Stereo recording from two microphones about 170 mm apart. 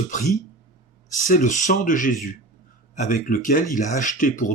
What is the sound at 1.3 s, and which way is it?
Speech, 45° left (ahead or behind).